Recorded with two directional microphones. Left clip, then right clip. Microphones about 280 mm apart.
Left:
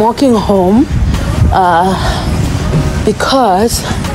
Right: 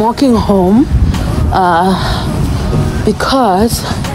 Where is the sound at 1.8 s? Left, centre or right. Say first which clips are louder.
Left 1 dB; centre.